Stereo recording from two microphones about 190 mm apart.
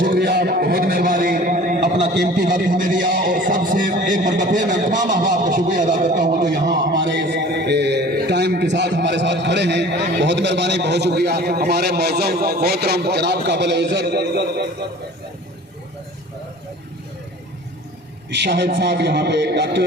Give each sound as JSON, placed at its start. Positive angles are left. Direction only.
{"t": 0.0, "sound": "a man's voice", "side_deg": -55}
{"t": 2.2, "sound": "a man's voice", "side_deg": -45}
{"t": 6.4, "sound": "a man's voice", "side_deg": -70}
{"t": 18.3, "sound": "a man's voice", "side_deg": -65}